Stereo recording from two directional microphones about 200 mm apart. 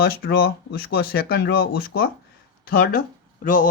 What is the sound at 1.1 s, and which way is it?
Speech, 50° left (ahead or behind).